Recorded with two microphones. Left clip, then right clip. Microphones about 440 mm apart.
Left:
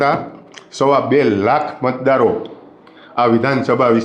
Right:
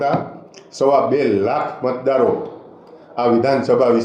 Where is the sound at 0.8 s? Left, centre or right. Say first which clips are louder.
Left 2 dB; left.